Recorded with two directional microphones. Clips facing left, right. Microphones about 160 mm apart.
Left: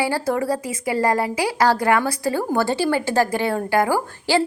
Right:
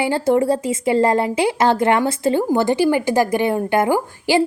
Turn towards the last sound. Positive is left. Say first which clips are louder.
# right 3 dB
turn(degrees=-20)  # may be behind; listen again after turning